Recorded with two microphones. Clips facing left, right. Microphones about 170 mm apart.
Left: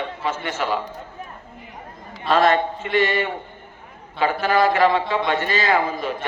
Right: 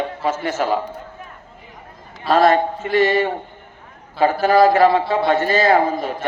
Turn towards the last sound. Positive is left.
turn(degrees=-40)  # may be behind; listen again after turning